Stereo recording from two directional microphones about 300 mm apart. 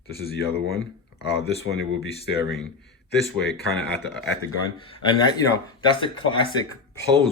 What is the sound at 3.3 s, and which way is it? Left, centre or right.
Speech, left.